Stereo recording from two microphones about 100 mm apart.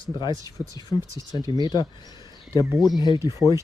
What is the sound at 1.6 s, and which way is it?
Speech, 45° left (ahead or behind).